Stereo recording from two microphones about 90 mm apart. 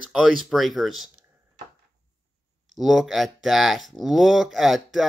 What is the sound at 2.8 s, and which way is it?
Speech, 5° right (ahead or behind).